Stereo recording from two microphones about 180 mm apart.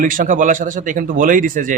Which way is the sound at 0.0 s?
50° right (ahead or behind).